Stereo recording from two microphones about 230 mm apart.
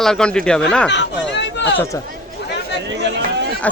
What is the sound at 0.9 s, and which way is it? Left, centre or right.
Speech, left.